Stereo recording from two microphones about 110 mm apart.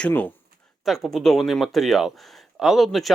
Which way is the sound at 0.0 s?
15° left (ahead or behind).